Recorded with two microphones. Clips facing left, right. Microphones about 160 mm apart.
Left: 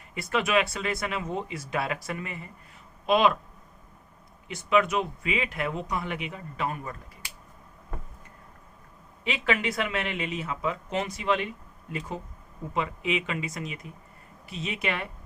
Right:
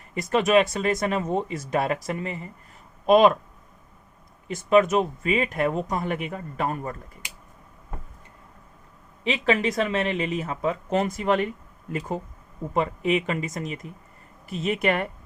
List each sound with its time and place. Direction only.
0.1 s speech: 40° right (ahead or behind)
3.1 s speech: 45° right (ahead or behind)
4.4 s speech: 40° right (ahead or behind)
9.2 s speech: 30° right (ahead or behind); by 15.1 s 50° right (ahead or behind)